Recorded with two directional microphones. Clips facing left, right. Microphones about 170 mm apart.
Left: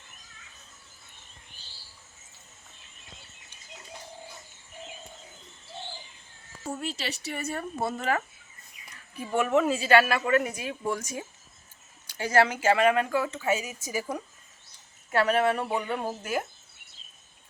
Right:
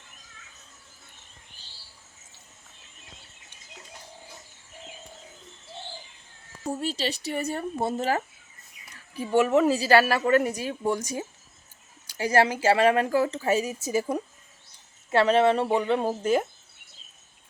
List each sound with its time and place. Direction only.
6.7 s speech: 35° right (ahead or behind)
9.3 s speech: 35° right (ahead or behind)
13.8 s speech: 25° right (ahead or behind)